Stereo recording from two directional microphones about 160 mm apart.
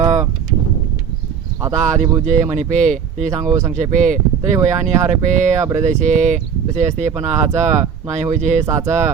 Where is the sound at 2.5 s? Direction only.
50° right (ahead or behind).